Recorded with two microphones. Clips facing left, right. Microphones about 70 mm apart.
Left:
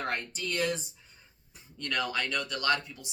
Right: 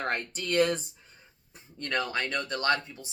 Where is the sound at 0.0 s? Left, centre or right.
Right.